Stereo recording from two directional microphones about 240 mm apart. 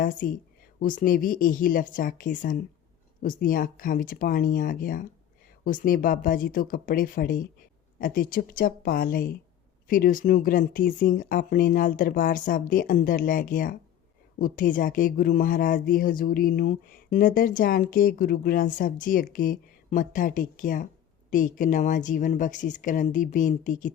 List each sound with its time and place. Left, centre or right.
0.2 s speech: left